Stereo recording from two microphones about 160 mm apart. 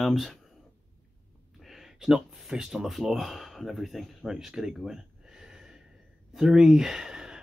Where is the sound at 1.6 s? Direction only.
Centre (ahead or behind).